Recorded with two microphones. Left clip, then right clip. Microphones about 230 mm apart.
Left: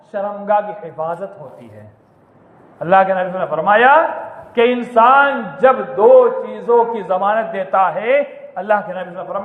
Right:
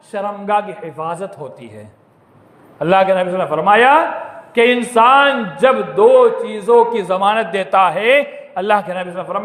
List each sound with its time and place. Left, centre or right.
0.1 s a man's voice: right
2.7 s a man's voice: right